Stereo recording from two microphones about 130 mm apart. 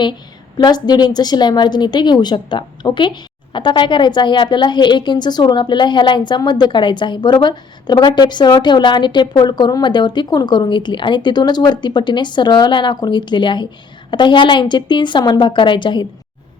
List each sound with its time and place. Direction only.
0.0 s a woman's voice: 35° left (ahead or behind)